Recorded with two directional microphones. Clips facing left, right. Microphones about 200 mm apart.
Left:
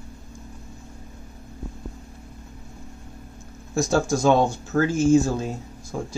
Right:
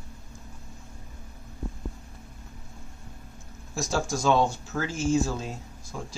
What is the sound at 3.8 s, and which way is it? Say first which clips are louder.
Speech: left 7 dB; 55° left (ahead or behind).